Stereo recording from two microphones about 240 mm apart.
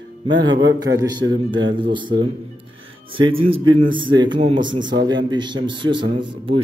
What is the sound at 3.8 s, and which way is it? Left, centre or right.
A man's voice, centre.